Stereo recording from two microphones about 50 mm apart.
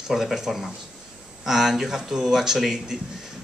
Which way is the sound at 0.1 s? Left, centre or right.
Centre.